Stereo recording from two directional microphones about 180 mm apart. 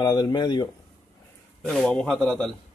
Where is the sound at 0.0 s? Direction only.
25° left (ahead or behind).